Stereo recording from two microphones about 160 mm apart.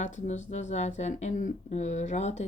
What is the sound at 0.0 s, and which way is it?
Speech, 50° left (ahead or behind).